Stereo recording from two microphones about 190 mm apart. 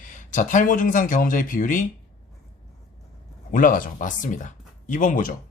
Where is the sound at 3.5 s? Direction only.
45° left (ahead or behind).